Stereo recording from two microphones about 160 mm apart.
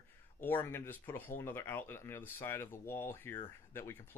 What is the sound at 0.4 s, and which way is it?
Speech, 15° left (ahead or behind).